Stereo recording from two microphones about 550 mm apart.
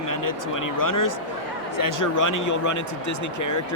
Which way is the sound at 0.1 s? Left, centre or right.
Left.